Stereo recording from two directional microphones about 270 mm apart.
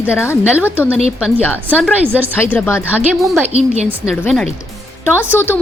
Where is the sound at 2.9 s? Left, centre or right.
Centre.